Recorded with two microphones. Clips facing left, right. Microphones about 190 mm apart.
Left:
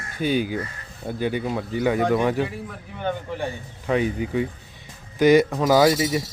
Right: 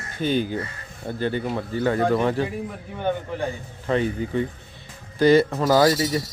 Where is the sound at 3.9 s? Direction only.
10° left (ahead or behind).